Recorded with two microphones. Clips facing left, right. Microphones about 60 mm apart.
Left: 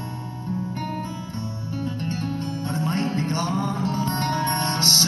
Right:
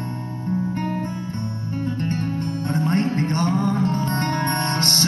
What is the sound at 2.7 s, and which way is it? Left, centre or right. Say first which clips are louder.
Music: right 4 dB; right.